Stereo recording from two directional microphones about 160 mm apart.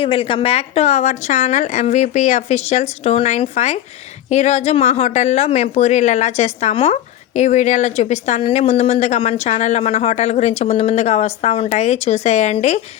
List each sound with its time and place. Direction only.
0.0 s speech: 35° left (ahead or behind)